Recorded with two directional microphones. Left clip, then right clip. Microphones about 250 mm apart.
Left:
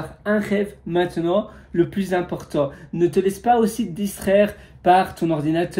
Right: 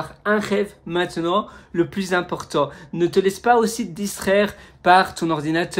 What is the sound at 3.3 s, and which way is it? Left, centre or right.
Speech, centre.